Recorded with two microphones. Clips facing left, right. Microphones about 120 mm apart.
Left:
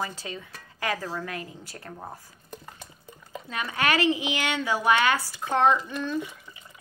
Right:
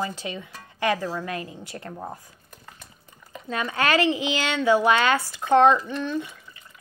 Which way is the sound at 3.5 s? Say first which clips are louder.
Right 3 dB; 30° right (ahead or behind).